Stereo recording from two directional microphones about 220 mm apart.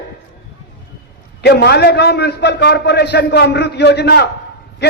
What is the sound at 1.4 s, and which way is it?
Speech, 50° left (ahead or behind).